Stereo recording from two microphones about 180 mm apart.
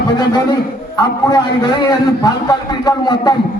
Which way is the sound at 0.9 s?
25° left (ahead or behind).